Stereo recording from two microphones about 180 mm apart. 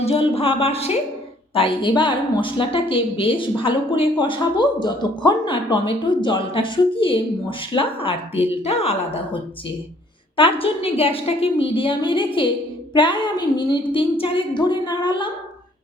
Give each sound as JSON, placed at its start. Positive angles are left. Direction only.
{"t": 0.0, "sound": "a woman's voice", "side_deg": 30}